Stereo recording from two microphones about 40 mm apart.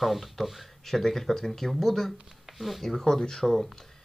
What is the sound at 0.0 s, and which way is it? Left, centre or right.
Speech, centre.